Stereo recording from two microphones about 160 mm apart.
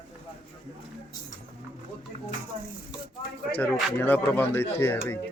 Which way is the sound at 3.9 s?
10° left (ahead or behind).